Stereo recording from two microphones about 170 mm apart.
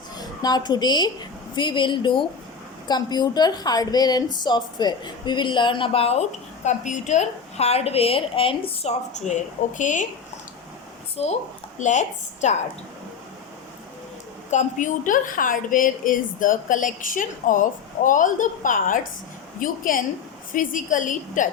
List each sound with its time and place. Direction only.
0.2 s a woman's voice: 25° left (ahead or behind); by 10.1 s 45° left (ahead or behind)
11.2 s a woman's voice: 35° left (ahead or behind)
14.5 s a woman's voice: 45° left (ahead or behind)